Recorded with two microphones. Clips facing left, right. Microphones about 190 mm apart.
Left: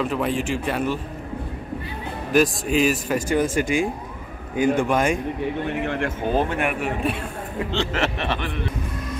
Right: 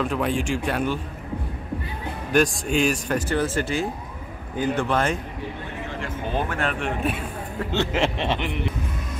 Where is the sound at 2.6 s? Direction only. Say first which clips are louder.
Left 2 dB; 5° left (ahead or behind).